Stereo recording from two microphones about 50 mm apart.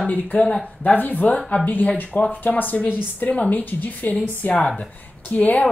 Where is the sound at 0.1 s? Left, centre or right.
Left.